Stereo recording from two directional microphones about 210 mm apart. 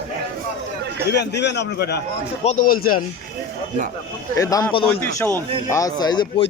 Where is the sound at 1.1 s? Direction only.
55° left (ahead or behind).